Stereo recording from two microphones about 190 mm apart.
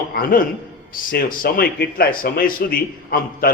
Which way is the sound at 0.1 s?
50° left (ahead or behind).